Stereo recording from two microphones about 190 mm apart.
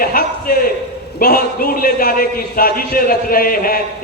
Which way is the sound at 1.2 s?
50° left (ahead or behind).